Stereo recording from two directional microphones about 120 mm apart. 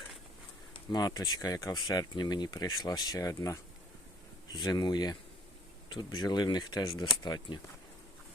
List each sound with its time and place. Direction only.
0.7 s speech: 35° left (ahead or behind)